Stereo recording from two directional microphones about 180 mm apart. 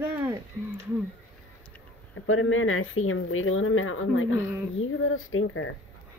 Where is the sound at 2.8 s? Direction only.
90° left.